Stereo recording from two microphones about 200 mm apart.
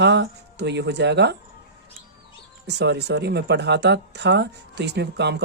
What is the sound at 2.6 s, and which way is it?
Speech, 60° right (ahead or behind).